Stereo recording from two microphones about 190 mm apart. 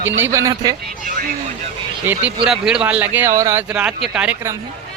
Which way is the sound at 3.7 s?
5° right (ahead or behind).